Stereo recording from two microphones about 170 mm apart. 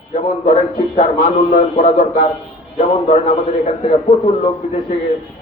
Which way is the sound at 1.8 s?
55° left (ahead or behind).